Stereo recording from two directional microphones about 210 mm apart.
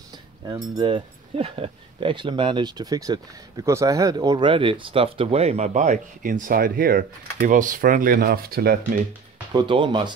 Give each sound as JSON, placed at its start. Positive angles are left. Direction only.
{"t": 0.5, "sound": "speech", "side_deg": -20}
{"t": 9.5, "sound": "speech", "side_deg": -20}